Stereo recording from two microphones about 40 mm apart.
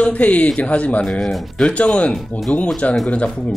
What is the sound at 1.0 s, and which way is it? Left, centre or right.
Speech, centre.